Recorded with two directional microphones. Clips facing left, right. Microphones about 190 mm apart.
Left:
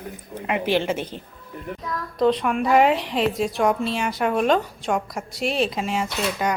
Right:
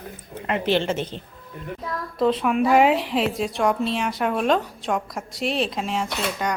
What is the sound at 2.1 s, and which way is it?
A woman's voice, centre (ahead or behind).